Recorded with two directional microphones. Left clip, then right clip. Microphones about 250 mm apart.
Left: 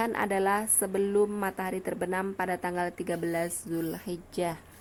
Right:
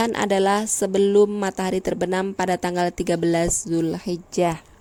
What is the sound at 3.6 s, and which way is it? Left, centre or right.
Speech, right.